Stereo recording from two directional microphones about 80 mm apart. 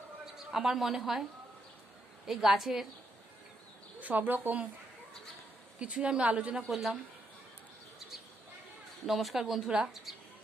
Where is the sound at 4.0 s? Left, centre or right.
Right.